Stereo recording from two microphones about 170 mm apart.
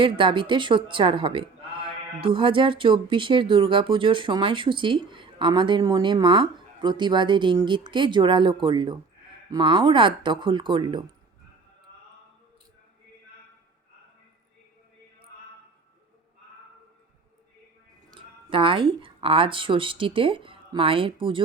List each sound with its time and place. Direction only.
0.0 s a woman's voice: 30° right (ahead or behind)
18.1 s speech: 30° right (ahead or behind)